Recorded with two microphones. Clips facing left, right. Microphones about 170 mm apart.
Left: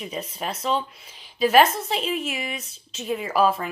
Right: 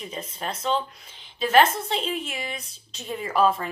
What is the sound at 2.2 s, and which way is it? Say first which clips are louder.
Speech: left 3 dB; 30° right (ahead or behind).